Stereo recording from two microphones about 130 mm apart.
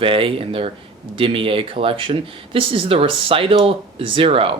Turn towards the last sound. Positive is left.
turn(degrees=-45)  # may be behind; listen again after turning